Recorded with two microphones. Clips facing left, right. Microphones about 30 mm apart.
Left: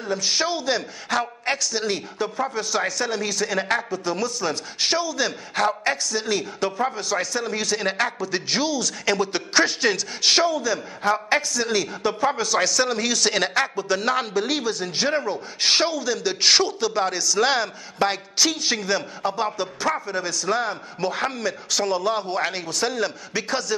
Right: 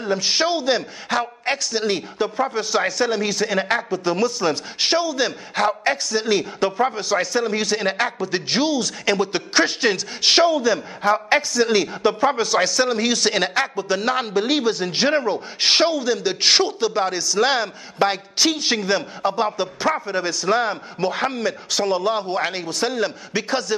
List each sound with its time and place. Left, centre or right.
0.0 s a man's voice: centre